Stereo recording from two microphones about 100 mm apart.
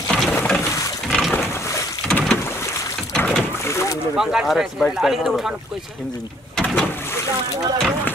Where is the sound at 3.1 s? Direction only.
5° left (ahead or behind).